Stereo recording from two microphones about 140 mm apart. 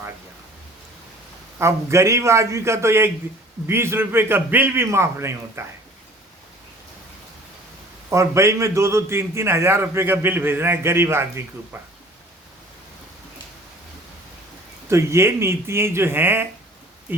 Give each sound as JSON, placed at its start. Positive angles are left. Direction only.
{"t": 1.5, "sound": "a man's voice", "side_deg": -20}
{"t": 8.1, "sound": "a man's voice", "side_deg": -20}
{"t": 14.8, "sound": "a man's voice", "side_deg": -20}